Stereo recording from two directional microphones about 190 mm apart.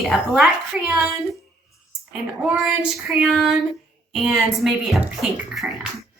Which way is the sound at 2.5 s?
Centre (ahead or behind).